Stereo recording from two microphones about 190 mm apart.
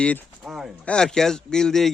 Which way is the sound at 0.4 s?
5° right (ahead or behind).